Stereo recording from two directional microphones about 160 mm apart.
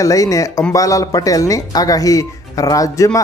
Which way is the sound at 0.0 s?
20° left (ahead or behind).